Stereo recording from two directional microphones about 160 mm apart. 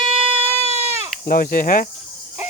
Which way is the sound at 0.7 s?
15° right (ahead or behind).